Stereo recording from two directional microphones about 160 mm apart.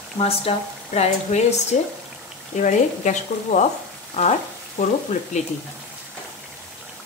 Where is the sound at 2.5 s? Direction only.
50° left (ahead or behind).